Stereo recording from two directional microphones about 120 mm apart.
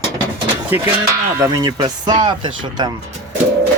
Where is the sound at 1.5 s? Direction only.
35° right (ahead or behind).